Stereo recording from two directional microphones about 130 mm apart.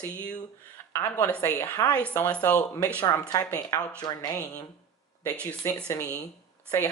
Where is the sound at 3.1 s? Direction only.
25° left (ahead or behind).